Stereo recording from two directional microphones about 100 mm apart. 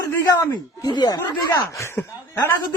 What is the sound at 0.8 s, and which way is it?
Speech, 45° left (ahead or behind).